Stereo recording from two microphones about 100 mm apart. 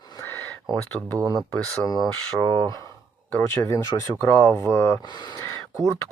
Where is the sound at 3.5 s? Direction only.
35° left (ahead or behind).